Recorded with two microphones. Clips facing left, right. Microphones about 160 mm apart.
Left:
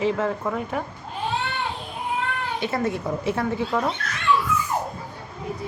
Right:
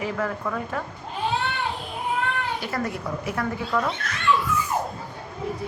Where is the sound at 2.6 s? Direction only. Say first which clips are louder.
Left 4 dB; 25° left (ahead or behind).